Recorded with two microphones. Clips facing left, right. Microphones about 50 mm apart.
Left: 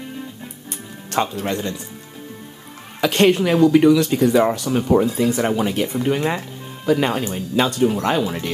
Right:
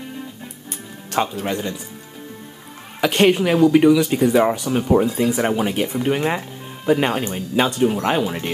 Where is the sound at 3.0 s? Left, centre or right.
Centre.